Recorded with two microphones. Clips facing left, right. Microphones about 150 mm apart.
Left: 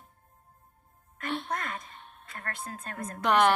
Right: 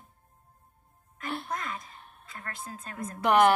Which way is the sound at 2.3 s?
55° left (ahead or behind).